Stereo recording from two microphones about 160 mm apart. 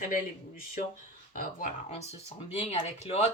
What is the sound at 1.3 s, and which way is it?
Speech, 60° left (ahead or behind).